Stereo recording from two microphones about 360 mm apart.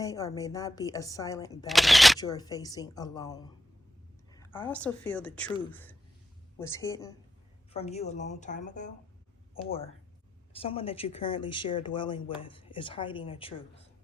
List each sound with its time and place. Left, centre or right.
0.0 s a woman's voice: centre
10.5 s speech: centre